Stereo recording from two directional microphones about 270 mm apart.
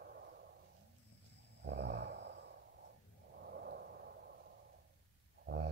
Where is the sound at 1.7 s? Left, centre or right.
Right.